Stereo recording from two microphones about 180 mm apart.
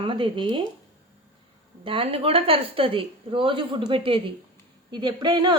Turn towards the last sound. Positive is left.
turn(degrees=-25)  # may be behind; listen again after turning